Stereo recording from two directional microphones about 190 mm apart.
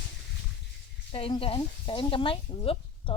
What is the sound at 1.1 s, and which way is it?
Speech, 30° left (ahead or behind).